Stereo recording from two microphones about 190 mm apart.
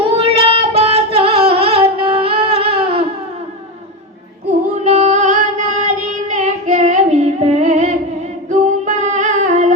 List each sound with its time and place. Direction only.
0.0 s singing: 30° right (ahead or behind)
4.8 s female singing: 35° right (ahead or behind)